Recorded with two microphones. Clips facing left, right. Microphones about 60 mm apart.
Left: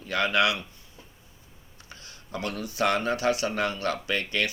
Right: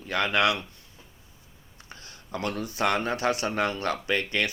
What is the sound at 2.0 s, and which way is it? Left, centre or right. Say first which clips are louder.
Speech: right 2 dB; right.